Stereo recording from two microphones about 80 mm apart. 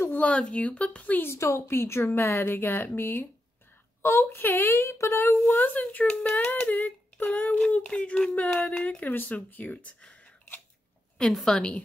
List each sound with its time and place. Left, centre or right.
0.1 s speech: centre
1.2 s speech: left
5.5 s speech: left
11.1 s a woman's voice: centre
11.5 s speech: centre